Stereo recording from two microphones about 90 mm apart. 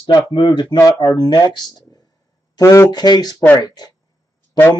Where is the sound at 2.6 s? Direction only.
35° left (ahead or behind).